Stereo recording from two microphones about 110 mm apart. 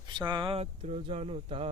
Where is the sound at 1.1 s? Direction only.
70° right (ahead or behind).